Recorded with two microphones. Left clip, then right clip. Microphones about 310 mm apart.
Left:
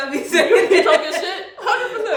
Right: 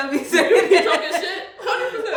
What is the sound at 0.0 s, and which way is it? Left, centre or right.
Chuckle, centre.